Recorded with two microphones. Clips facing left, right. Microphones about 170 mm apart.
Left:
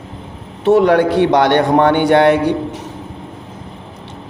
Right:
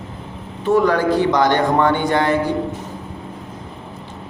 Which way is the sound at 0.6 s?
70° left (ahead or behind).